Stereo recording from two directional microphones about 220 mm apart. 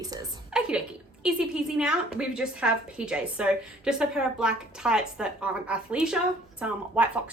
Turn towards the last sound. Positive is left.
turn(degrees=-5)  # may be behind; listen again after turning